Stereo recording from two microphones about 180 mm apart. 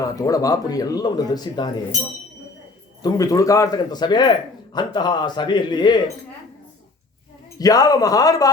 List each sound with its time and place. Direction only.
0.0 s speech: 20° left (ahead or behind)
3.0 s speech: 20° left (ahead or behind)
7.6 s speech: 20° left (ahead or behind)